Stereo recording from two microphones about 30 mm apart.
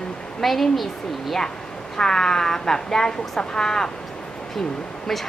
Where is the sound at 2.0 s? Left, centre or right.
Left.